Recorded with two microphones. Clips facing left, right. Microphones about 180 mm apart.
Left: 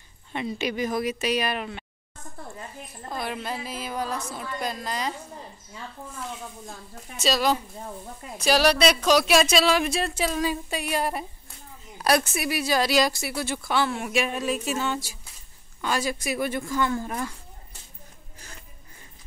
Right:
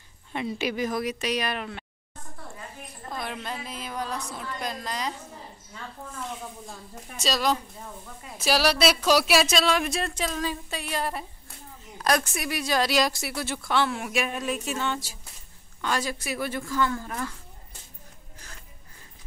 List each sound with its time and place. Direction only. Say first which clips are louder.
0.3 s speech: even; centre (ahead or behind)
3.1 s a woman's voice: left 3 dB; 5° left (ahead or behind)
6.7 s speech: even; centre (ahead or behind); by 17.3 s 20° left (ahead or behind)